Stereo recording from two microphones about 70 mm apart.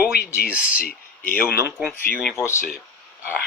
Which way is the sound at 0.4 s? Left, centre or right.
Centre.